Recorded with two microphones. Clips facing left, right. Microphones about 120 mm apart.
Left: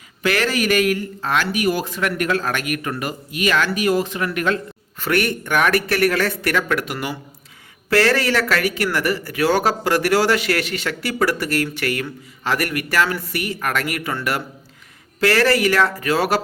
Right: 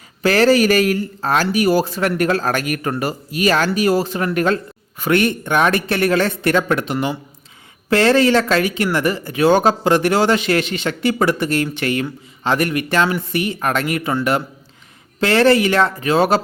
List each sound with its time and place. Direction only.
0.2 s speech: 35° right (ahead or behind)
4.9 s speech: 20° right (ahead or behind)